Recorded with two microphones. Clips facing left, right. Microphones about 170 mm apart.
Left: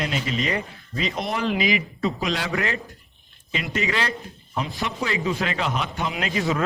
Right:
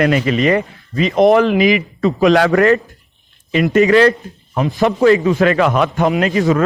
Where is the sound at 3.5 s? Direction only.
50° right (ahead or behind).